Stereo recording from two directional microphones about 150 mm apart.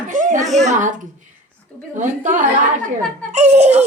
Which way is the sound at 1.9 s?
55° right (ahead or behind).